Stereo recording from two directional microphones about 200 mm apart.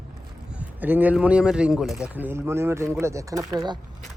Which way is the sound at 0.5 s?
10° right (ahead or behind).